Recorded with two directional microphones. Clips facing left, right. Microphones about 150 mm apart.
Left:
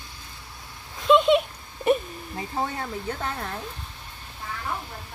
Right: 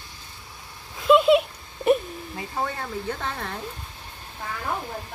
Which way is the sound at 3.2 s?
5° left (ahead or behind).